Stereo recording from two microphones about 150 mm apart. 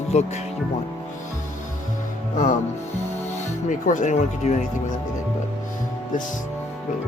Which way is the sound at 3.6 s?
55° left (ahead or behind).